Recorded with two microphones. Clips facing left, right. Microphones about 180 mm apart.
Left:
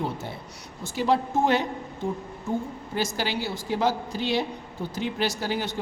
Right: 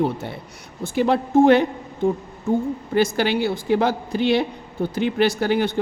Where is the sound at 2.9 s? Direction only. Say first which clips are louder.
Right 9 dB; 60° right (ahead or behind).